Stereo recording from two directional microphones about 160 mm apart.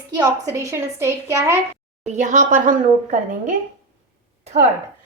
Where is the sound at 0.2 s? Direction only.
20° right (ahead or behind).